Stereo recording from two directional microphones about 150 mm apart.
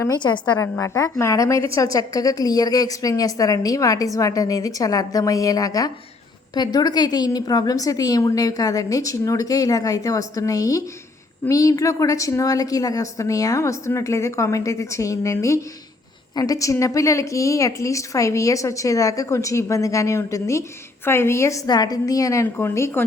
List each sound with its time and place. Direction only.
0.2 s a woman's voice: 30° left (ahead or behind)